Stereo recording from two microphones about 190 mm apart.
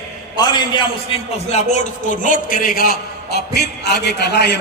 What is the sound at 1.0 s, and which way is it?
A man's voice, 30° left (ahead or behind).